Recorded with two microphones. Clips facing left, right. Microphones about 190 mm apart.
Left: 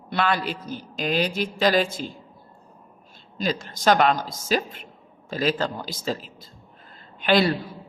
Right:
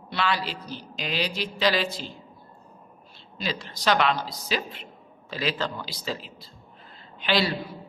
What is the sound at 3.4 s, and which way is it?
A man's voice, 50° left (ahead or behind).